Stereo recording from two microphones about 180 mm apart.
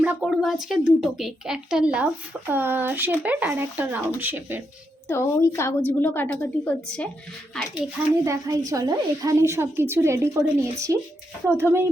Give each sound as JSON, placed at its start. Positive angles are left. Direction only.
{"t": 0.0, "sound": "a woman's voice", "side_deg": -5}
{"t": 5.0, "sound": "a woman's voice", "side_deg": 15}
{"t": 7.9, "sound": "a woman's voice", "side_deg": -15}